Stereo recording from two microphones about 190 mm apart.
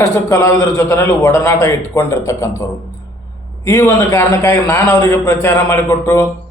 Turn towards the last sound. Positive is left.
turn(degrees=15)  # may be behind; listen again after turning